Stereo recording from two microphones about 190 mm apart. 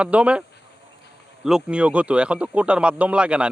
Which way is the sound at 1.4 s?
5° right (ahead or behind).